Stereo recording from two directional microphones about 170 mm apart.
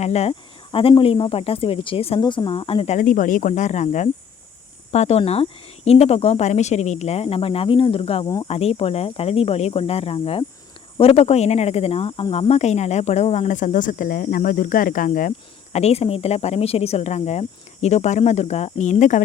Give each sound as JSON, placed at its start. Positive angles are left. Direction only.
{"t": 0.0, "sound": "speech", "side_deg": 40}
{"t": 15.7, "sound": "speech", "side_deg": 40}